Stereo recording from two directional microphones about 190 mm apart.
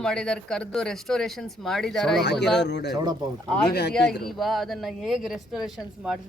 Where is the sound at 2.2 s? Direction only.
65° left (ahead or behind).